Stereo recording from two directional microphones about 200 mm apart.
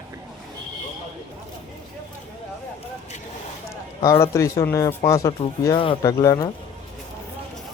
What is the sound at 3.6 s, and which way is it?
A man's voice, 15° left (ahead or behind).